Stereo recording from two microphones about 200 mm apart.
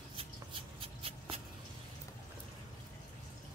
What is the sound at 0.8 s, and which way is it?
Shuffle, 30° right (ahead or behind).